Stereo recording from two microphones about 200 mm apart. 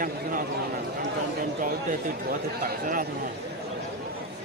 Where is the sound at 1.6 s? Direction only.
40° right (ahead or behind).